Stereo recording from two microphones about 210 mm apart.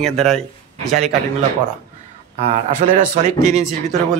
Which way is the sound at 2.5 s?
35° right (ahead or behind).